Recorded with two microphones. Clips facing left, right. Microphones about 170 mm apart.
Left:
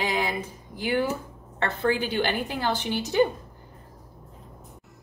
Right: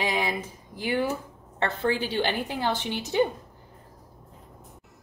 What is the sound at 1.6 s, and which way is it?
A woman's voice, 25° right (ahead or behind).